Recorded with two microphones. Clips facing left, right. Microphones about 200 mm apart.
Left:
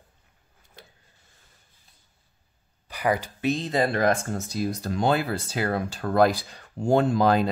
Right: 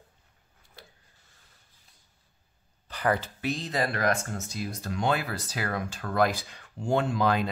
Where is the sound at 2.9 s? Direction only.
10° left (ahead or behind).